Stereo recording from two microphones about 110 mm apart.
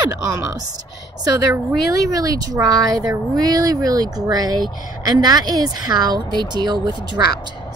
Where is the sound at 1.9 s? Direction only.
35° right (ahead or behind).